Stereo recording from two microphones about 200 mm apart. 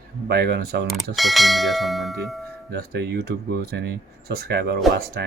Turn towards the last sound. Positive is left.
turn(degrees=-55)  # may be behind; listen again after turning